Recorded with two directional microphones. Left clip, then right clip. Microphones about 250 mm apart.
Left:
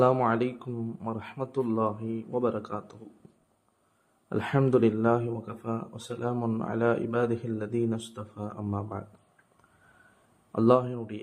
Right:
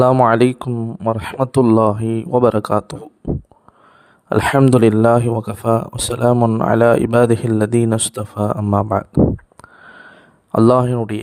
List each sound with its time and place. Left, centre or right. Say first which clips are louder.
0.0 s speech: right 12 dB; right
4.3 s speech: right 13 dB; right
10.5 s speech: right 11 dB; right